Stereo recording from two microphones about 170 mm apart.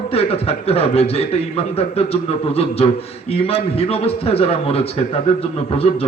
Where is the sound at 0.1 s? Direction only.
35° left (ahead or behind).